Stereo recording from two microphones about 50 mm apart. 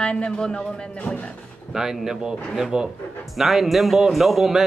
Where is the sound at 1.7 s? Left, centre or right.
Centre.